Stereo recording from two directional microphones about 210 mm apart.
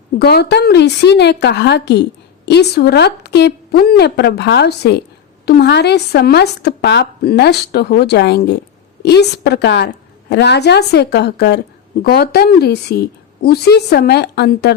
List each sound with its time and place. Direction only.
0.2 s a woman's voice: 50° left (ahead or behind)